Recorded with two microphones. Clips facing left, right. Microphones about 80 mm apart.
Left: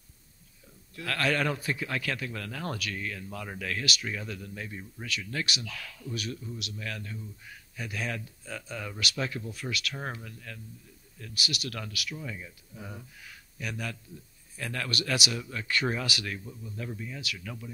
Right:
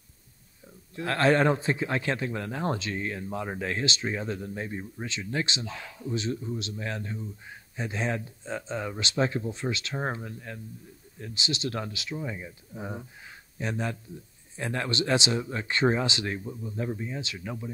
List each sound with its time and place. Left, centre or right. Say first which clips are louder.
0.9 s speech: right 6 dB; right